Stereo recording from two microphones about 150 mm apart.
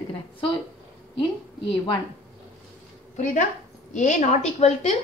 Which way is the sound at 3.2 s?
60° left (ahead or behind).